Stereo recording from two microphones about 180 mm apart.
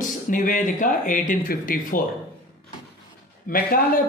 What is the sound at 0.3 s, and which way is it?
A man's voice, 50° left (ahead or behind).